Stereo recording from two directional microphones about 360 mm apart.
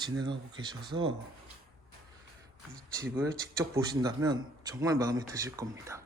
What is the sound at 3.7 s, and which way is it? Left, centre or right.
Speech, centre.